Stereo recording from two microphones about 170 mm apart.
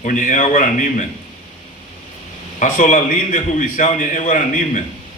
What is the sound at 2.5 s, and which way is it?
A man's voice, 50° left (ahead or behind).